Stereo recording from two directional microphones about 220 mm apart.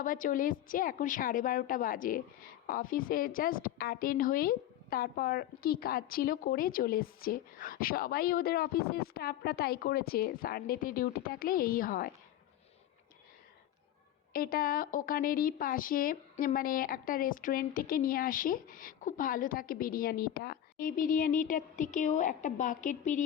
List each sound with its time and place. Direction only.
0.0 s a woman's voice: 40° left (ahead or behind)
14.3 s a woman's voice: 40° left (ahead or behind)